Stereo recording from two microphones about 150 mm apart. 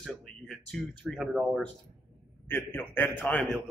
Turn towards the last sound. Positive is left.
turn(degrees=15)  # may be behind; listen again after turning